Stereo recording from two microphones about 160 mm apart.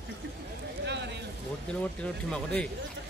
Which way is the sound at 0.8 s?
90° right.